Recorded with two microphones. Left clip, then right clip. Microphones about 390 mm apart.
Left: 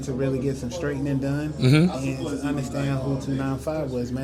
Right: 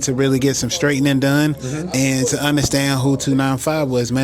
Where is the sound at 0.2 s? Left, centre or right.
Right.